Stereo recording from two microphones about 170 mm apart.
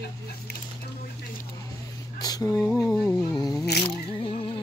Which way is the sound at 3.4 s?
20° left (ahead or behind).